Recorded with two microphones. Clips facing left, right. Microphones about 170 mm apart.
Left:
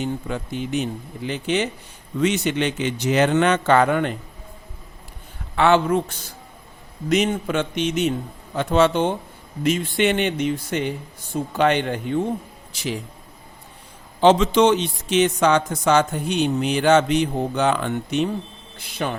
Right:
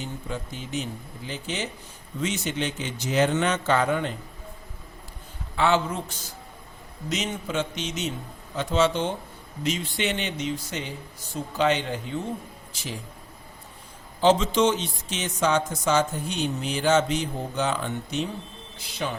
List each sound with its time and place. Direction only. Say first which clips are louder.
0.0 s a man's voice: left 7 dB; 65° left (ahead or behind)
5.5 s a man's voice: left 6 dB; 60° left (ahead or behind)
12.7 s speech: left 9 dB; 75° left (ahead or behind)
14.2 s a man's voice: left 5 dB; 65° left (ahead or behind)